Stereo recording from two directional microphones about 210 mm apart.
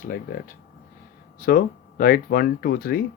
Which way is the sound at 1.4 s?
45° left (ahead or behind).